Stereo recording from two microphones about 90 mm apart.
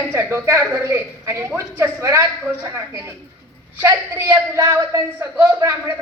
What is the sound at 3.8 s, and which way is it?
A woman's voice, 25° right (ahead or behind).